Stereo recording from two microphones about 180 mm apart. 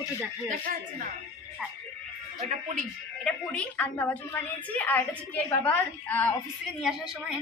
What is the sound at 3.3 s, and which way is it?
A woman's voice, 5° left (ahead or behind).